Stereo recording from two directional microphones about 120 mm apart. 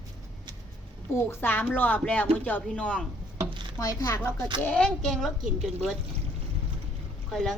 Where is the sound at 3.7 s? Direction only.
30° left (ahead or behind).